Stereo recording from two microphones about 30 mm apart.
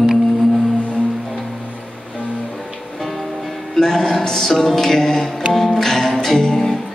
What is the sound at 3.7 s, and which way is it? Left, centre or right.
Music, centre.